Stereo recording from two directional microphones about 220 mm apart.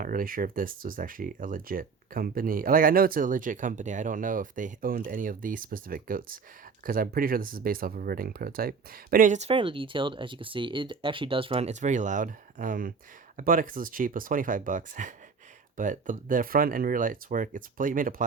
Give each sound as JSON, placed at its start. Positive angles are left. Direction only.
{"t": 0.0, "sound": "speech", "side_deg": -40}